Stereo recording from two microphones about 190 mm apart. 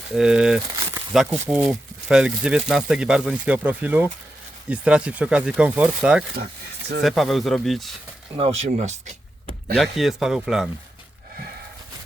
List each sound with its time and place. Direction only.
0.1 s speech: 5° right (ahead or behind)
6.3 s speech: 55° right (ahead or behind)
7.0 s speech: centre (ahead or behind)
8.4 s speech: 35° right (ahead or behind)
9.7 s speech: centre (ahead or behind)